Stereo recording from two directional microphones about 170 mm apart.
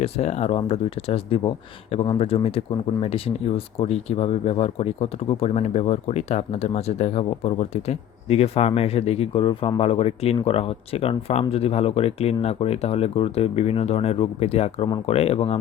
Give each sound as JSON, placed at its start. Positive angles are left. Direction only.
{"t": 0.0, "sound": "speech", "side_deg": 40}